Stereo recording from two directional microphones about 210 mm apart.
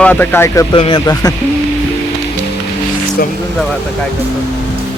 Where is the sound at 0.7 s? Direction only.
25° left (ahead or behind).